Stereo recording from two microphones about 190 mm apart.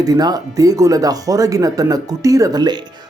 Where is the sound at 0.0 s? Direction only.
20° right (ahead or behind).